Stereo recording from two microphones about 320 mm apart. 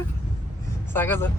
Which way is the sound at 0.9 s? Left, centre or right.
Centre.